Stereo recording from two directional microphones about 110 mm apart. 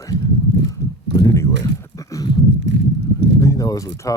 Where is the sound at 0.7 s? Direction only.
35° left (ahead or behind).